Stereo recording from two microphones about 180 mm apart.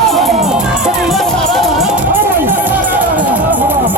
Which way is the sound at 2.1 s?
10° right (ahead or behind).